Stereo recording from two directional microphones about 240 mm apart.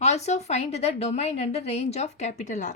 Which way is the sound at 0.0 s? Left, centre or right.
Left.